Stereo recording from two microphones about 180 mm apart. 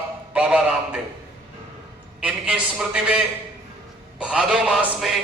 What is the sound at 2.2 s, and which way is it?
A man's voice, 5° right (ahead or behind).